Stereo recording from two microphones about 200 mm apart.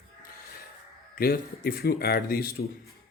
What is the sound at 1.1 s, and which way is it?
Speech, 45° left (ahead or behind).